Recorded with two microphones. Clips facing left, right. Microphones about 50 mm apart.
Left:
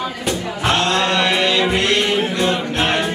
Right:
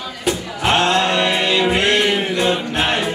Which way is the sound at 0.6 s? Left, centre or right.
Right.